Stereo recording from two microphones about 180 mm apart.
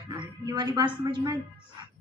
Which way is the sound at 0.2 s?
25° right (ahead or behind).